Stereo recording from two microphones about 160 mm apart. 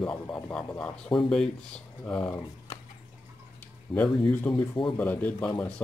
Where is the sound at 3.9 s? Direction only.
10° left (ahead or behind).